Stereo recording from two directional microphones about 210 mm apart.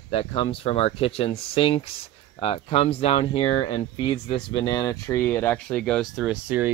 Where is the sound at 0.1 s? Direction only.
25° left (ahead or behind).